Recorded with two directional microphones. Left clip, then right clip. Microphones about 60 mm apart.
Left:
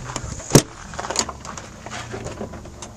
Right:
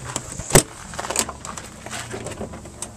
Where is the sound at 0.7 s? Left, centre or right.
Right.